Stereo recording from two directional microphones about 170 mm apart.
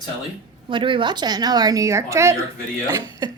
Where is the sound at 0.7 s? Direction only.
30° right (ahead or behind).